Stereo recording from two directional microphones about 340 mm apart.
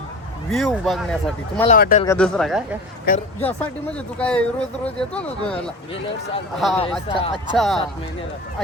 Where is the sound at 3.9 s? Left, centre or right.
Centre.